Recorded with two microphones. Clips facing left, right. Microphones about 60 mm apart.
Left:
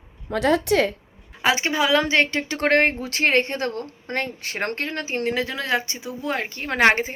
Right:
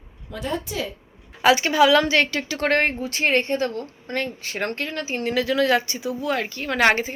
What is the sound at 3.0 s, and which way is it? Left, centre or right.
A woman's voice, left.